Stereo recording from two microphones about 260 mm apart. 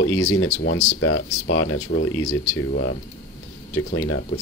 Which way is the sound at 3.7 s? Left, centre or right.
Left.